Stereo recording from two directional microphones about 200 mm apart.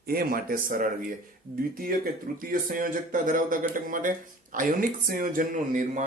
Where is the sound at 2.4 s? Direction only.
45° right (ahead or behind).